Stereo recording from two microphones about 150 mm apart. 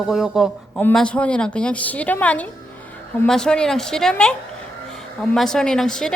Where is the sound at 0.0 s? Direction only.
5° right (ahead or behind).